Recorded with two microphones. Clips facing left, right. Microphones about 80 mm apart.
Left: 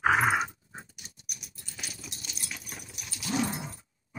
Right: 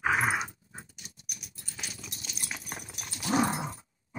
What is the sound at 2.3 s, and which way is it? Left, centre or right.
Dog, right.